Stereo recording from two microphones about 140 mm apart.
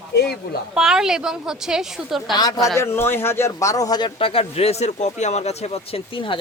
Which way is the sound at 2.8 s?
15° left (ahead or behind).